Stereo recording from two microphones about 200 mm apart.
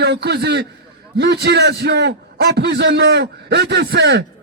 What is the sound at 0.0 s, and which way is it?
A man's voice, 55° right (ahead or behind).